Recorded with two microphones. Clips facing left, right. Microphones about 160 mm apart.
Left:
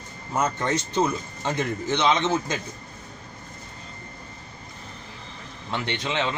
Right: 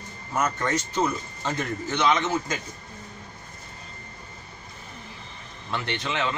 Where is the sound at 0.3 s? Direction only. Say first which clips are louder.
Left 1 dB; 25° left (ahead or behind).